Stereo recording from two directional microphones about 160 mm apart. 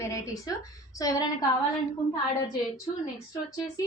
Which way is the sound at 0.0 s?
20° left (ahead or behind).